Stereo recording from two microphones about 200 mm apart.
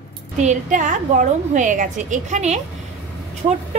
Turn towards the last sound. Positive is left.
turn(degrees=-30)  # may be behind; listen again after turning